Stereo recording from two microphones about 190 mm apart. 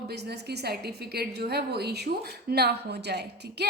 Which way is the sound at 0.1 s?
60° right (ahead or behind).